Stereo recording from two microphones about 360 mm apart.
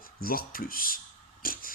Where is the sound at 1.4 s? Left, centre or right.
Left.